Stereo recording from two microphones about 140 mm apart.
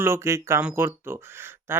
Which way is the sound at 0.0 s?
20° right (ahead or behind).